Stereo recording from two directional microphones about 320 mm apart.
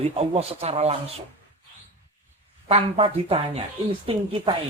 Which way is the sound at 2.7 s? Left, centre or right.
Centre.